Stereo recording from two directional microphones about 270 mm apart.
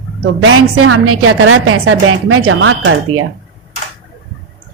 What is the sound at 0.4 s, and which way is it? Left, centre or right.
A woman's voice, right.